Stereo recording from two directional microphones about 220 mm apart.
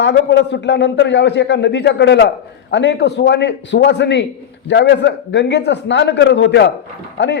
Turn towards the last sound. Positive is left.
turn(degrees=50)  # may be behind; listen again after turning